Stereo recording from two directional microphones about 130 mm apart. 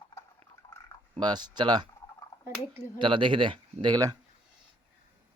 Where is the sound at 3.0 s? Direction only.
40° right (ahead or behind).